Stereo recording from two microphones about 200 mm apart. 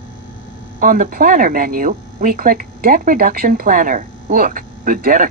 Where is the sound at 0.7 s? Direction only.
45° right (ahead or behind).